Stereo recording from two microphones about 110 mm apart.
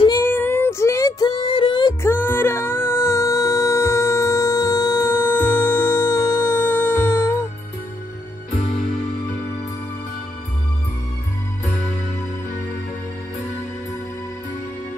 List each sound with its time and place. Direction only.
0.1 s child singing: 20° left (ahead or behind); by 2.0 s 45° left (ahead or behind)
2.0 s music: 20° left (ahead or behind)